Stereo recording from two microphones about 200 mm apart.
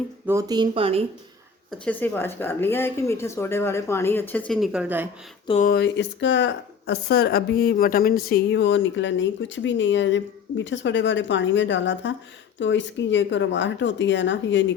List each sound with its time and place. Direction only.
0.3 s speech: 15° right (ahead or behind)
1.8 s speech: 10° left (ahead or behind); by 5.0 s 5° right (ahead or behind)
5.6 s speech: 55° left (ahead or behind)